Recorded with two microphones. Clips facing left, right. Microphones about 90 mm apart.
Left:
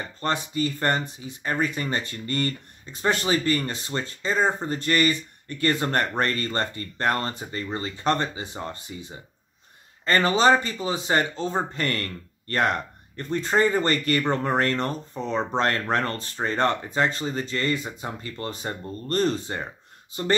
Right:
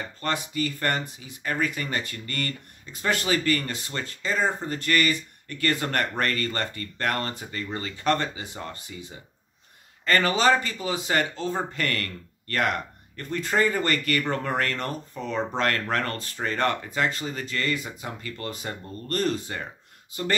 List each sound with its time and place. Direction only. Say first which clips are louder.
0.2 s speech: left 2 dB; 25° left (ahead or behind)
10.0 s speech: left 2 dB; 25° left (ahead or behind)